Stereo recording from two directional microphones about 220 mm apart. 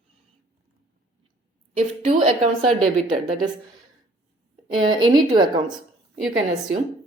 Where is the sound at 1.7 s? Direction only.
25° right (ahead or behind).